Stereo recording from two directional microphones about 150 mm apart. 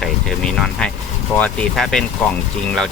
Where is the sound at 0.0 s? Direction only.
5° left (ahead or behind).